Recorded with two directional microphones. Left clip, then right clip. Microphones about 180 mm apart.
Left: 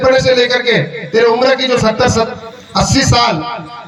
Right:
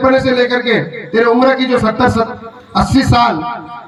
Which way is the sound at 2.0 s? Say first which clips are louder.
Even; 40° right (ahead or behind).